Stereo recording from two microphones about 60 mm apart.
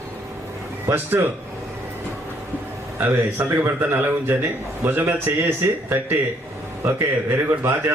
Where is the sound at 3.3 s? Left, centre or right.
Right.